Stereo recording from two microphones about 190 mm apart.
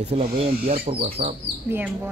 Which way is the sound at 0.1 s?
30° right (ahead or behind).